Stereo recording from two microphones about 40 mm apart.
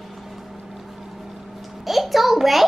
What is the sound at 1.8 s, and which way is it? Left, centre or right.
Speech, centre.